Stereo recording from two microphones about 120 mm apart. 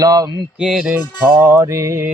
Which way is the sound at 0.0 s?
30° right (ahead or behind).